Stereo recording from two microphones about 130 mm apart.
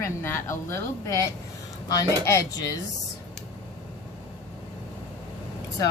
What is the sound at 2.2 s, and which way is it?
Speech, 20° left (ahead or behind).